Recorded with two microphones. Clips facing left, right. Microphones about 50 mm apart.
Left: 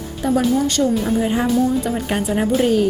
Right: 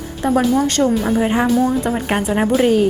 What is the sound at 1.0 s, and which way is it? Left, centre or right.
A woman's voice, right.